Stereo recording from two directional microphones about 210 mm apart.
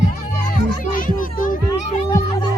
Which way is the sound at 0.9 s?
40° left (ahead or behind).